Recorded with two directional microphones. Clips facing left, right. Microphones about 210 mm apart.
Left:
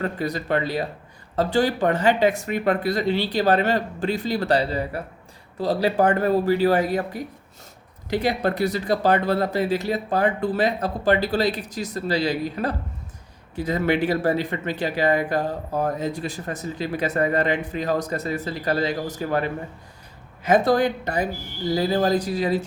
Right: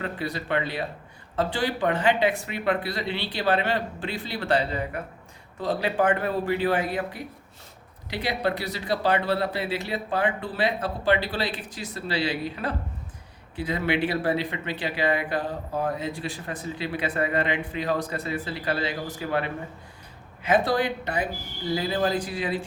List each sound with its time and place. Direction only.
0.0 s speech: 45° left (ahead or behind)